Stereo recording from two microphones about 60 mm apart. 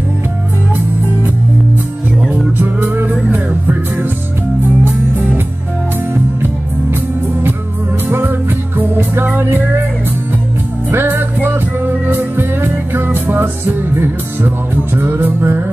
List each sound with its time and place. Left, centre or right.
2.2 s music: right
8.1 s music: right
10.9 s music: right